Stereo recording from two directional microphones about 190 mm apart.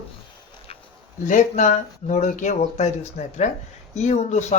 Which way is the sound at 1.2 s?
40° left (ahead or behind).